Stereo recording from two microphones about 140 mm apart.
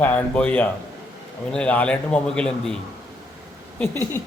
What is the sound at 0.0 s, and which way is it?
A man's voice, 10° left (ahead or behind).